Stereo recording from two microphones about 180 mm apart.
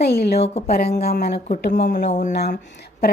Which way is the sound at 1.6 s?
70° left (ahead or behind).